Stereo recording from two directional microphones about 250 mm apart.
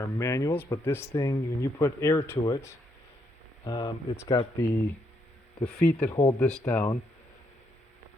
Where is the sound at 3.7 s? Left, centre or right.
Centre.